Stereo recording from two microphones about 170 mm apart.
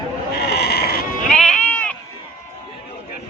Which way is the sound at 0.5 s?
70° left (ahead or behind).